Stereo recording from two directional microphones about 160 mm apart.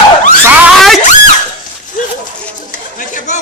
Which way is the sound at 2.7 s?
55° left (ahead or behind).